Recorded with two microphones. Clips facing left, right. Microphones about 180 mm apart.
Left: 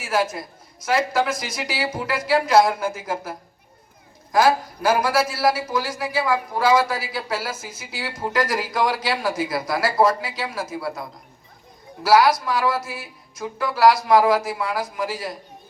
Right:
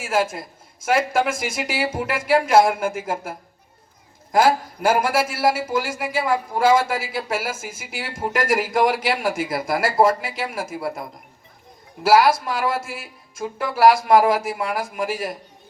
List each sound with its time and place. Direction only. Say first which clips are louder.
0.0 s a man's voice: right 1 dB; 25° right (ahead or behind)
12.0 s a man's voice: right 1 dB; 25° right (ahead or behind)